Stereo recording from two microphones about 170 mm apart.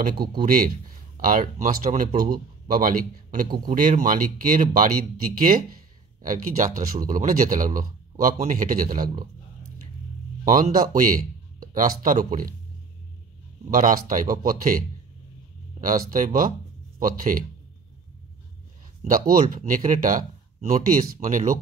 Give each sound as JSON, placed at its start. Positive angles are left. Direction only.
{"t": 0.2, "sound": "speech", "side_deg": -65}
{"t": 1.1, "sound": "speech", "side_deg": -55}
{"t": 6.2, "sound": "speech", "side_deg": -50}
{"t": 10.4, "sound": "speech", "side_deg": -55}
{"t": 13.7, "sound": "speech", "side_deg": -50}
{"t": 19.0, "sound": "speech", "side_deg": -55}